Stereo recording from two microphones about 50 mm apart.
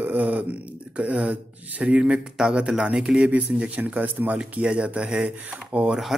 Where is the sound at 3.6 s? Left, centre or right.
Right.